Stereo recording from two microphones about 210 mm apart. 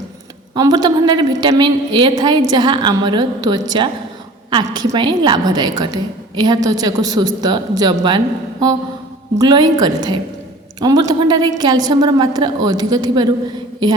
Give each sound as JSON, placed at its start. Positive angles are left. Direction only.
{"t": 0.5, "sound": "a woman's voice", "side_deg": -20}
{"t": 9.4, "sound": "a woman's voice", "side_deg": -20}